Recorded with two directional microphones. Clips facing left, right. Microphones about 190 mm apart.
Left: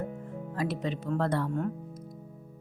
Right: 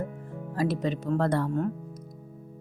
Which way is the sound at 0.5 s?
40° right (ahead or behind).